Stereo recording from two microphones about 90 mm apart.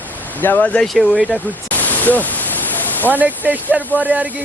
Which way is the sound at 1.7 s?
20° left (ahead or behind).